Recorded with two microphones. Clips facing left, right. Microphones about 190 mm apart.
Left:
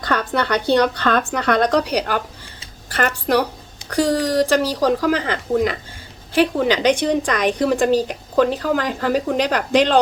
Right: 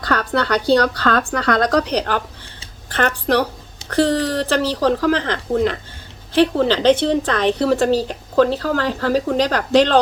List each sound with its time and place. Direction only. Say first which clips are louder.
0.0 s a woman's voice: right 1 dB; 20° left (ahead or behind)